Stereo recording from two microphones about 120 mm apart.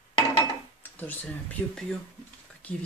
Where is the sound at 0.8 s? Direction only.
15° left (ahead or behind).